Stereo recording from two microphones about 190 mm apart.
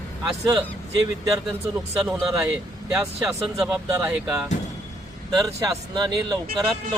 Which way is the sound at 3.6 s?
5° right (ahead or behind).